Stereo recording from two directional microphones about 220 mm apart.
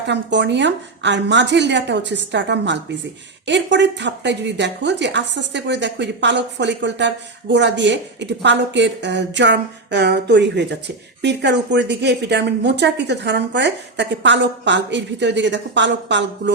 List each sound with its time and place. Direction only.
0.1 s speech: 55° right (ahead or behind)